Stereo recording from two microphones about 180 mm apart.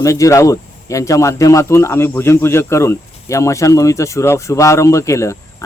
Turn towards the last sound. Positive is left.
turn(degrees=15)  # may be behind; listen again after turning